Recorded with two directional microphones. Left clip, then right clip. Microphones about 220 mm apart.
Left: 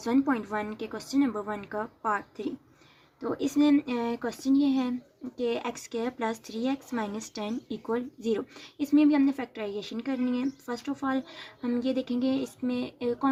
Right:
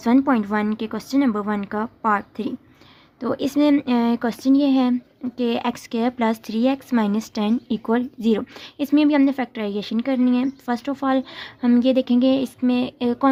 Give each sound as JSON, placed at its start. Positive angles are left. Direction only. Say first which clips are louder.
{"t": 0.0, "sound": "speech", "louder": "right 8 dB", "side_deg": -45}